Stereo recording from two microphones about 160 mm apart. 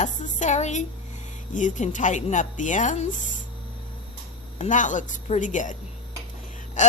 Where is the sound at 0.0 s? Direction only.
50° left (ahead or behind).